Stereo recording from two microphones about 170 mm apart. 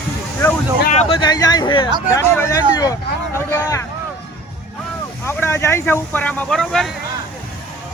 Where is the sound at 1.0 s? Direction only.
30° left (ahead or behind).